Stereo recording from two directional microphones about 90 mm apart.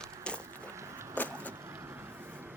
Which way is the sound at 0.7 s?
30° right (ahead or behind).